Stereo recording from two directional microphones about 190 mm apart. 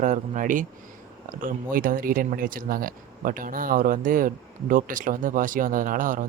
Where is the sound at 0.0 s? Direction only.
45° right (ahead or behind).